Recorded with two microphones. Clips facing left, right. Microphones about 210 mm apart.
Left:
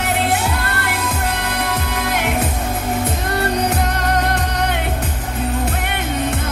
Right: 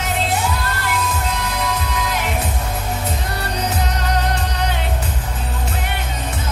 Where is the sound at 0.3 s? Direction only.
60° left (ahead or behind).